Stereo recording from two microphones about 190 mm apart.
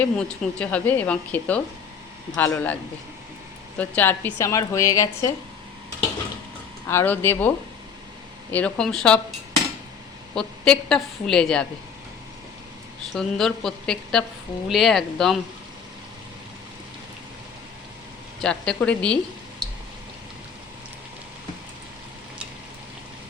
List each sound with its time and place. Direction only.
0.0 s a woman's voice: 5° left (ahead or behind)
3.8 s a woman's voice: 10° left (ahead or behind)
6.8 s a woman's voice: 10° left (ahead or behind)
10.3 s a woman's voice: 5° left (ahead or behind)
13.1 s a woman's voice: centre (ahead or behind)
18.4 s a woman's voice: 5° left (ahead or behind)